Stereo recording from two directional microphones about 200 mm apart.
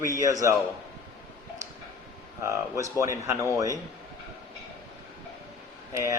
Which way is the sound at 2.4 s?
15° right (ahead or behind).